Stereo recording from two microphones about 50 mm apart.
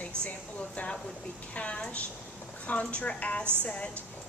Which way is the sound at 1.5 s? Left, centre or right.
Left.